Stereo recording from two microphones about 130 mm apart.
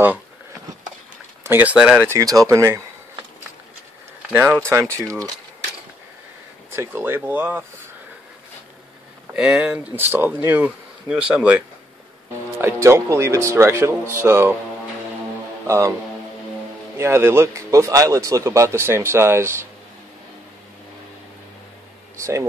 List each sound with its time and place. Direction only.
1.4 s speech: 15° right (ahead or behind)
2.1 s speech: 25° right (ahead or behind)
4.3 s speech: 15° right (ahead or behind)
6.7 s speech: 20° right (ahead or behind)
9.3 s speech: 5° right (ahead or behind)
15.6 s speech: 20° right (ahead or behind)
16.9 s speech: 20° right (ahead or behind)
22.1 s speech: 20° right (ahead or behind)